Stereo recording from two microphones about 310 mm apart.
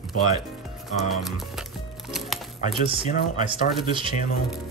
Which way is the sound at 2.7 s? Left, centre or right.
Centre.